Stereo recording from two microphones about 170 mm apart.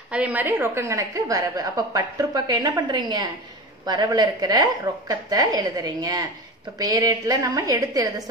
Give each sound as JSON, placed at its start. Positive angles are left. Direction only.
{"t": 0.1, "sound": "a woman's voice", "side_deg": -10}